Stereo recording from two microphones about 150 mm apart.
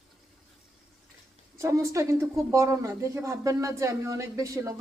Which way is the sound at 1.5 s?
20° right (ahead or behind).